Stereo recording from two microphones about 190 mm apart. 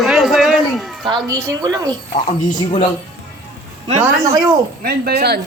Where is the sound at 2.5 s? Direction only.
25° left (ahead or behind).